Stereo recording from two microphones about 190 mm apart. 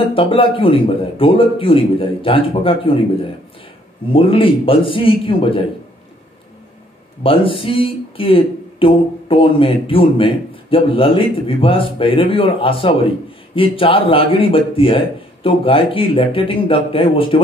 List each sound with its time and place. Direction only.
0.1 s speech: 30° left (ahead or behind)
4.1 s speech: 30° left (ahead or behind)
7.2 s speech: 30° left (ahead or behind)